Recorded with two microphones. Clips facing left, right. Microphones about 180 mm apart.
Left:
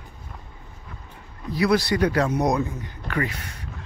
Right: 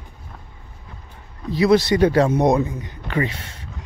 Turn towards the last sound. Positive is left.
turn(degrees=-25)  # may be behind; listen again after turning